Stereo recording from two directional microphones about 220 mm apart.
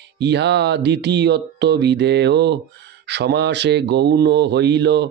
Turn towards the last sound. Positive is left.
turn(degrees=-50)  # may be behind; listen again after turning